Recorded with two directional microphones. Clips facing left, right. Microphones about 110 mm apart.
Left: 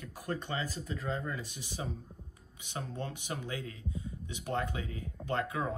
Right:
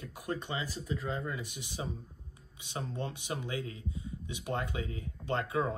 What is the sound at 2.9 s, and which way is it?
Speech, 20° right (ahead or behind).